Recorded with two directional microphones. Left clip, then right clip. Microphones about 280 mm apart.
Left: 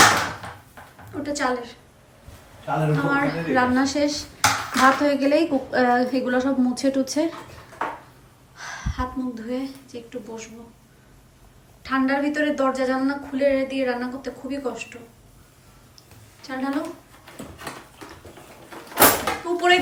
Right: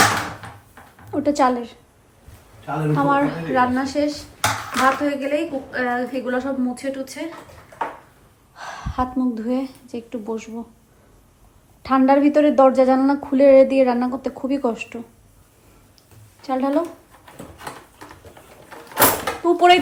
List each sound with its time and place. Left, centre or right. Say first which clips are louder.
1.1 s a woman's voice: right 7 dB; centre
2.6 s a woman's voice: right 3 dB; centre
8.5 s a woman's voice: right 6 dB; centre
11.8 s a woman's voice: right 7 dB; centre
16.4 s a woman's voice: right 7 dB; centre
17.3 s a sound: right 1 dB; centre
19.5 s speech: right 5 dB; centre